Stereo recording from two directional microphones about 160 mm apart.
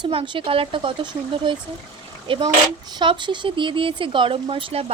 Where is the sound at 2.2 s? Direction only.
30° right (ahead or behind).